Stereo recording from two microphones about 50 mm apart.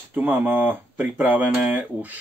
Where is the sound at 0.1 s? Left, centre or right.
Right.